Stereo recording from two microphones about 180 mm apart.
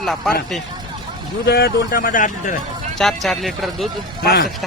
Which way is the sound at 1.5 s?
60° left (ahead or behind).